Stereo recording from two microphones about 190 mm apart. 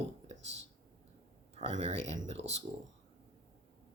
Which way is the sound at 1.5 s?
35° right (ahead or behind).